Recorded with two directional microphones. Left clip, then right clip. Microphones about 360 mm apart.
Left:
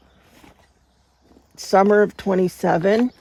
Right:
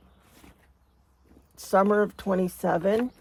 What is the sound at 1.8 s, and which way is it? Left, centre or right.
Speech, left.